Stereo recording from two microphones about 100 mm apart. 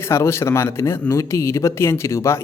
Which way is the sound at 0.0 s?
25° left (ahead or behind).